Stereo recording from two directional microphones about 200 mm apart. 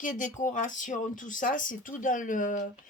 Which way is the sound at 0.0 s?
40° left (ahead or behind).